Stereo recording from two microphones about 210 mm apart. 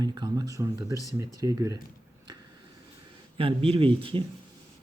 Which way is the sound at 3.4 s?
25° right (ahead or behind).